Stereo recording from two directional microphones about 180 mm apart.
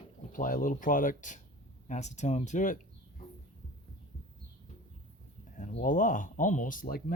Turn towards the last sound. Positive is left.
turn(degrees=50)  # may be behind; listen again after turning